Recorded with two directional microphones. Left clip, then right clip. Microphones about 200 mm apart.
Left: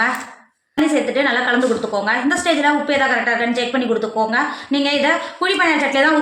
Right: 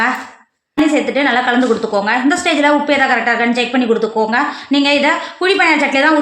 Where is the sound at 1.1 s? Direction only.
50° right (ahead or behind).